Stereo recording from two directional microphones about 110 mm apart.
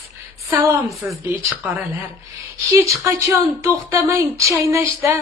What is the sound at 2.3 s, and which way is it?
Speech, 30° right (ahead or behind).